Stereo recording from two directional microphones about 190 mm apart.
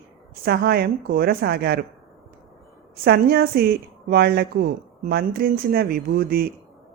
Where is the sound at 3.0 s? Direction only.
55° right (ahead or behind).